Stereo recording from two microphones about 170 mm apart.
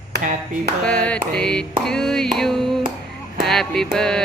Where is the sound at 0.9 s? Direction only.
5° left (ahead or behind).